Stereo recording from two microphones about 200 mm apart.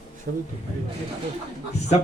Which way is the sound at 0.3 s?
45° right (ahead or behind).